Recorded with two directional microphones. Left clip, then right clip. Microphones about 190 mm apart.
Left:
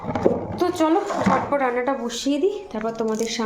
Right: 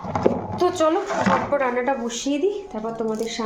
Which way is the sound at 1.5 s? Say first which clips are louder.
Even; centre (ahead or behind).